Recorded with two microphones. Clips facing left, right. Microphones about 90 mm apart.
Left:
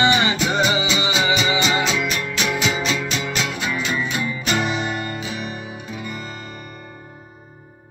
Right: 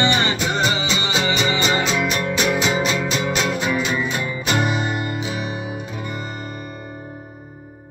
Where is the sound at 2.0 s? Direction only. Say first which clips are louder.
Right 3 dB; 35° right (ahead or behind).